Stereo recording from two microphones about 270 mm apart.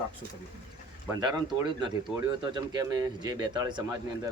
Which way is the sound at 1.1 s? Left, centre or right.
Centre.